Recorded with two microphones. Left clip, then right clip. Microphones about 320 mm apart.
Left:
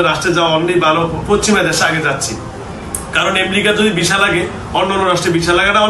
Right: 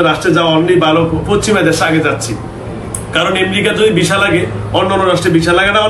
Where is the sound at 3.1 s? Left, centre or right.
Centre.